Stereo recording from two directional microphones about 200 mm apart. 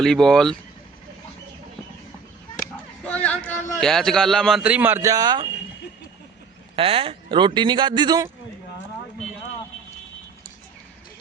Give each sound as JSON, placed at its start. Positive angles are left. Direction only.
{"t": 0.0, "sound": "a man's voice", "side_deg": 5}
{"t": 3.0, "sound": "a sound", "side_deg": 5}
{"t": 3.4, "sound": "a man's voice", "side_deg": 5}
{"t": 6.7, "sound": "speech", "side_deg": -30}